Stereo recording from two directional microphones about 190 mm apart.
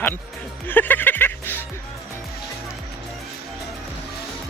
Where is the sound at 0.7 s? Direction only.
10° left (ahead or behind).